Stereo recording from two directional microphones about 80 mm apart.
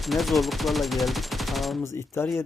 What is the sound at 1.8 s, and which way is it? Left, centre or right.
Speech, left.